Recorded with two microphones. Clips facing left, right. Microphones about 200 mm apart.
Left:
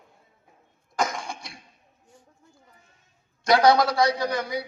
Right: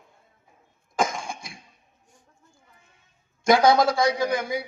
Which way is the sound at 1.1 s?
50° right (ahead or behind).